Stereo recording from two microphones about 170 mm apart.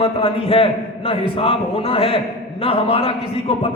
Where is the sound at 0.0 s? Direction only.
35° left (ahead or behind).